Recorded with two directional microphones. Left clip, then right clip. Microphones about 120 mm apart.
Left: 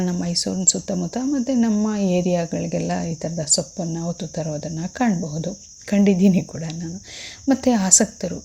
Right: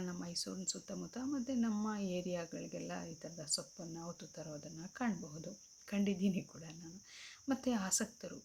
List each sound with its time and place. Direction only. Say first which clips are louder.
0.0 s speech: left 19 dB; 30° left (ahead or behind)